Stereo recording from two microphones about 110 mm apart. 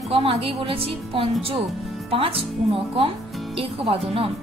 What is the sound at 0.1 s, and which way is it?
Speech, 60° right (ahead or behind).